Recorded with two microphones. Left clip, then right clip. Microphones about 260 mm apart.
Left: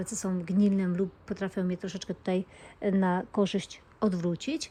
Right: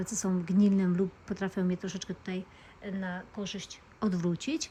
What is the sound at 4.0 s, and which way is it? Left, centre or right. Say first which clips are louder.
Speech: left 3 dB; centre.